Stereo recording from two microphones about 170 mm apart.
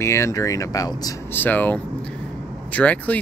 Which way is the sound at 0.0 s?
15° left (ahead or behind).